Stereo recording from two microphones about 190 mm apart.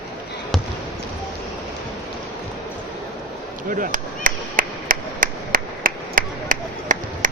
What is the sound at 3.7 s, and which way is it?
Chop, 45° right (ahead or behind).